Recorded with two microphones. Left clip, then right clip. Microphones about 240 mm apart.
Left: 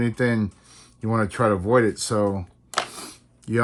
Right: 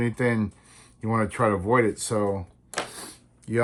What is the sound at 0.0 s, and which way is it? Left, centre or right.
Speech, left.